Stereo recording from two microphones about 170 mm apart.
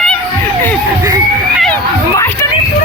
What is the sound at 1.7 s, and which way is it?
Speech, 15° left (ahead or behind).